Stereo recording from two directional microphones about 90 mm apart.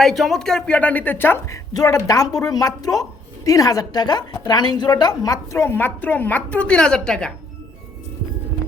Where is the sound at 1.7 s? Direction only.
40° left (ahead or behind); by 7.3 s 5° left (ahead or behind).